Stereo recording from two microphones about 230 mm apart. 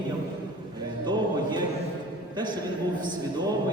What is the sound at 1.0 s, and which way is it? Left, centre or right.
A man's voice, centre.